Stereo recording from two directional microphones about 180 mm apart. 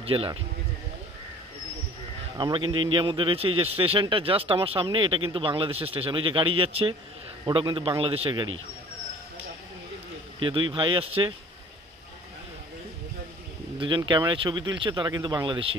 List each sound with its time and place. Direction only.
0.0 s speech: 30° right (ahead or behind)
2.3 s a man's voice: 25° right (ahead or behind)
10.4 s a man's voice: 25° right (ahead or behind)
13.7 s a man's voice: 25° right (ahead or behind)